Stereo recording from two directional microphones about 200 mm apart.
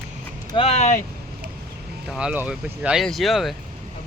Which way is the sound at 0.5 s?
30° left (ahead or behind).